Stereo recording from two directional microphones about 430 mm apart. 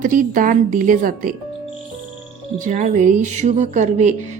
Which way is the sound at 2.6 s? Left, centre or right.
Centre.